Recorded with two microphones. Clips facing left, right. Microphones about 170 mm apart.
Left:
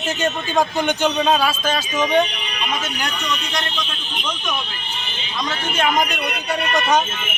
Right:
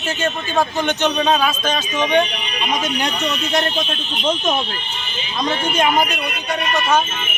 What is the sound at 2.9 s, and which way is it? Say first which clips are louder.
Speech: right 4 dB; 25° right (ahead or behind).